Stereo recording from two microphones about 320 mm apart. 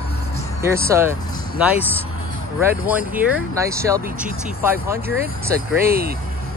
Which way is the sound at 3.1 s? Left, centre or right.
Centre.